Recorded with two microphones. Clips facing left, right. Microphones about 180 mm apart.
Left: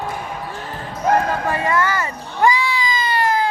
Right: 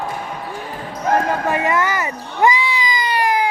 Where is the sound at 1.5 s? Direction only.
20° right (ahead or behind).